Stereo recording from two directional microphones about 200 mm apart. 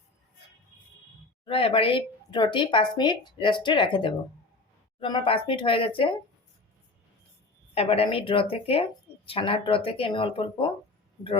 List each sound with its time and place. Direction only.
1.5 s speech: 30° left (ahead or behind)
7.7 s speech: 30° left (ahead or behind)